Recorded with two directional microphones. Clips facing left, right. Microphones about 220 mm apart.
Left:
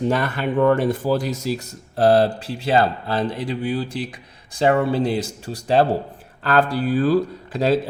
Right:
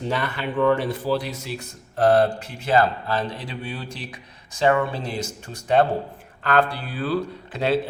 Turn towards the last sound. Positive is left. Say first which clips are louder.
# left 3 dB
turn(degrees=40)  # may be behind; listen again after turning